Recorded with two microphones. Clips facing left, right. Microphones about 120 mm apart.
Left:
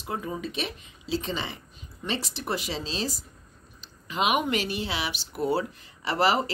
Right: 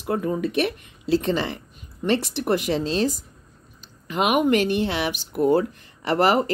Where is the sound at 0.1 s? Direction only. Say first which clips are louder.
Right 9 dB; 60° right (ahead or behind).